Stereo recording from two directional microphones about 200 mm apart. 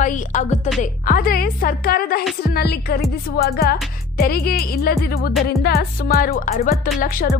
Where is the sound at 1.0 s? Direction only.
45° left (ahead or behind).